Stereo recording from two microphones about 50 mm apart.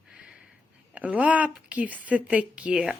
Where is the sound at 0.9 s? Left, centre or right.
Right.